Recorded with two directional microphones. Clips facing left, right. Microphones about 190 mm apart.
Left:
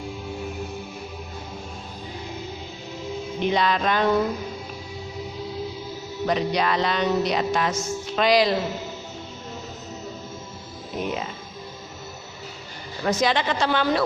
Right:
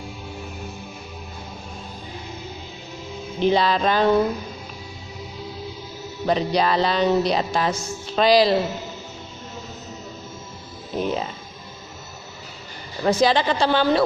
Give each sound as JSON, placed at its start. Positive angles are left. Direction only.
{"t": 3.4, "sound": "music", "side_deg": -30}
{"t": 6.2, "sound": "music", "side_deg": -30}
{"t": 10.9, "sound": "speech", "side_deg": -30}
{"t": 13.1, "sound": "music", "side_deg": -30}